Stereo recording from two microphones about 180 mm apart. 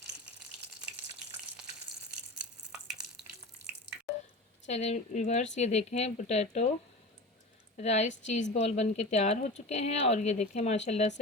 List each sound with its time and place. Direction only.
2.0 s a sound: 5° right (ahead or behind)
4.6 s a woman's voice: 40° left (ahead or behind)
7.8 s a woman's voice: 40° left (ahead or behind)